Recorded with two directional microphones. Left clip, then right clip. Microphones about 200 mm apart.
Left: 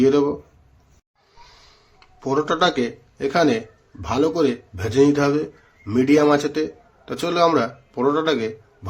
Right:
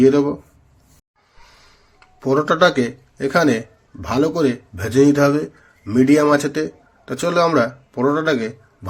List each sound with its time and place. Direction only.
0.0 s speech: 10° right (ahead or behind)
1.5 s a sound: 10° right (ahead or behind)
4.0 s a man's voice: 15° right (ahead or behind)